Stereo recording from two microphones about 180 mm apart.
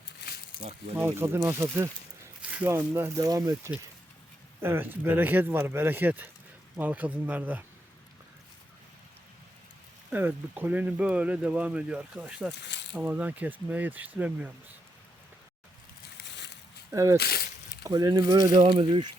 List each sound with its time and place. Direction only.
0.9 s speech: 15° right (ahead or behind)
10.1 s speech: 10° right (ahead or behind)
16.2 s a sound: 75° left (ahead or behind)
16.9 s speech: 15° right (ahead or behind)
17.2 s speech: 60° left (ahead or behind)
17.8 s speech: 20° right (ahead or behind)